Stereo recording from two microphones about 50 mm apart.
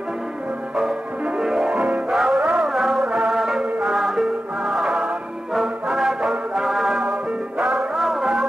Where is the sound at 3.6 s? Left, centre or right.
Centre.